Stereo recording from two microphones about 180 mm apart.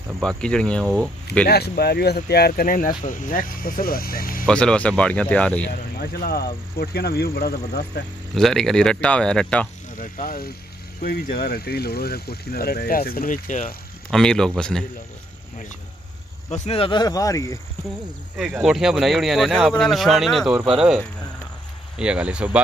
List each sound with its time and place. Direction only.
0.2 s speech: 5° left (ahead or behind)
1.5 s speech: 60° left (ahead or behind)
4.5 s speech: 5° left (ahead or behind)
5.9 s speech: 60° left (ahead or behind)
8.4 s speech: centre (ahead or behind)
9.9 s speech: 45° left (ahead or behind)
14.1 s speech: 5° left (ahead or behind)
16.4 s speech: 35° left (ahead or behind); by 17.6 s 20° left (ahead or behind)
18.4 s speech: 5° right (ahead or behind)
21.9 s speech: 5° right (ahead or behind)